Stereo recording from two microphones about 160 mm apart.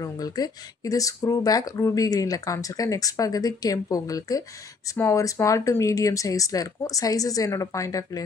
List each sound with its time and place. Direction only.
0.0 s speech: 20° left (ahead or behind)